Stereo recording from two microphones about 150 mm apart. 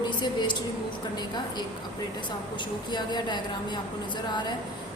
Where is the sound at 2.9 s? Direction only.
30° left (ahead or behind).